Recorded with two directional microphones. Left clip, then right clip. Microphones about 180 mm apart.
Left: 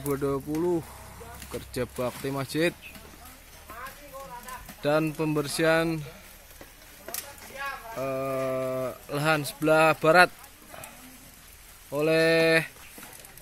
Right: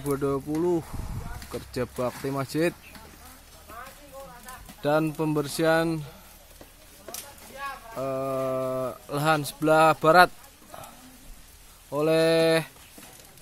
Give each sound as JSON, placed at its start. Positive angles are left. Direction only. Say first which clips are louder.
{"t": 0.0, "sound": "speech", "louder": "right 1 dB", "side_deg": -10}
{"t": 4.8, "sound": "speech", "louder": "right 1 dB", "side_deg": -10}
{"t": 7.9, "sound": "speech", "louder": "right 2 dB", "side_deg": -10}
{"t": 11.9, "sound": "speech", "louder": "right 1 dB", "side_deg": -10}